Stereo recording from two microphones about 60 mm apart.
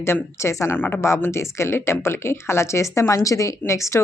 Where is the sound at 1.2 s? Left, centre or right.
Left.